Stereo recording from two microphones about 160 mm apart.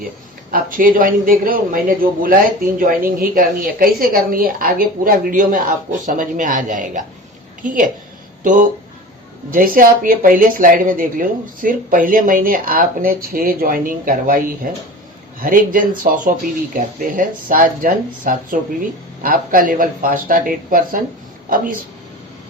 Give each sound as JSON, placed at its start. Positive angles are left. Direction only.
{"t": 0.5, "sound": "speech", "side_deg": -60}
{"t": 9.5, "sound": "speech", "side_deg": -60}